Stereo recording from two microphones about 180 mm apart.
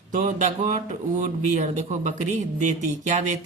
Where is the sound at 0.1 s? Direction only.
45° right (ahead or behind).